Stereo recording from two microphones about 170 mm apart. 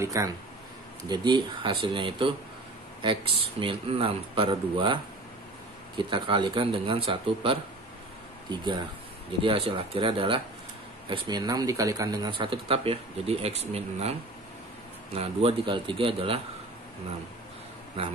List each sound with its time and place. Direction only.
0.0 s speech: 20° right (ahead or behind); by 14.1 s 40° right (ahead or behind)
15.1 s speech: 30° right (ahead or behind)